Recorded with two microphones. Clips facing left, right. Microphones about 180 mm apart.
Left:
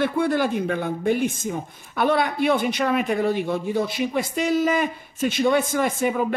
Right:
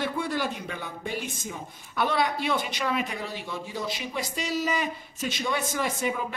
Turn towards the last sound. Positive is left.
turn(degrees=55)  # may be behind; listen again after turning